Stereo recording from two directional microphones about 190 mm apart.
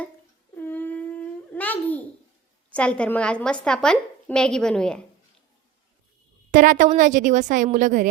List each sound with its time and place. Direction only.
0.5 s babbling: 10° left (ahead or behind)
2.6 s a woman's voice: 5° left (ahead or behind)
6.5 s a woman's voice: 45° right (ahead or behind)